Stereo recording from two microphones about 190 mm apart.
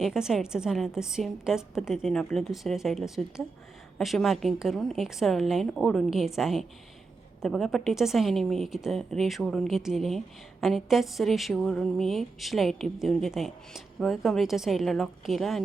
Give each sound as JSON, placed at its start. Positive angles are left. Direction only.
{"t": 0.0, "sound": "a woman's voice", "side_deg": -5}